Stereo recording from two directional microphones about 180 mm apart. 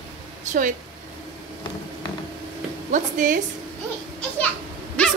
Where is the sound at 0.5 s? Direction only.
45° right (ahead or behind).